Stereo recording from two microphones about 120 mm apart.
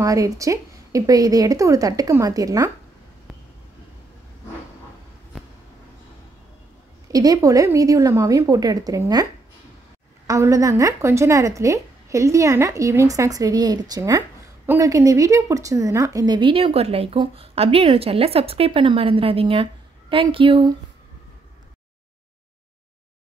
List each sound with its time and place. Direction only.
0.0 s a woman's voice: 30° right (ahead or behind)
7.1 s a woman's voice: 30° right (ahead or behind)
16.3 s a woman's voice: 45° right (ahead or behind)